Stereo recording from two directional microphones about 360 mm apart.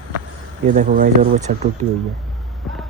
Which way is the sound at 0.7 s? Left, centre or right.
Right.